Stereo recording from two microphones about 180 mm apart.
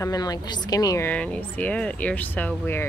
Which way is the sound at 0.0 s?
20° left (ahead or behind).